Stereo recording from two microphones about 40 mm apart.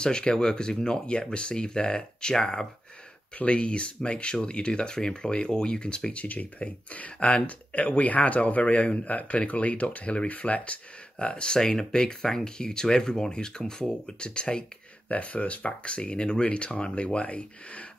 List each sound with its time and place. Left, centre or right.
0.0 s speech: left
3.3 s speech: left
7.7 s speech: left
15.0 s speech: left